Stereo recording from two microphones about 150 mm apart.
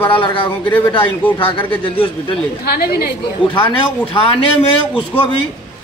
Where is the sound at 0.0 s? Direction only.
35° left (ahead or behind).